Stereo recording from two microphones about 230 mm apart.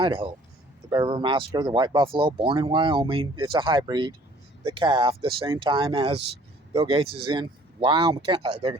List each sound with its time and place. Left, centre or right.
0.0 s speech: right